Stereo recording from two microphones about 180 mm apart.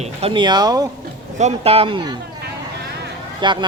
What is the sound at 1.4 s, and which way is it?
Speech, 35° right (ahead or behind).